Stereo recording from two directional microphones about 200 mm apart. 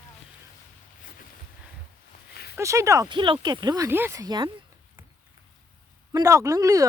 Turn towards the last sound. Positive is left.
turn(degrees=-15)  # may be behind; listen again after turning